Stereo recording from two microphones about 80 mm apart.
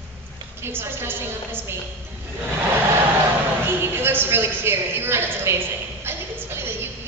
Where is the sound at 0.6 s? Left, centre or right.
Right.